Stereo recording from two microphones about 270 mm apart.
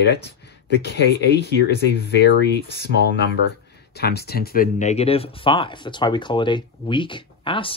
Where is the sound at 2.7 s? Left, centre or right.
Left.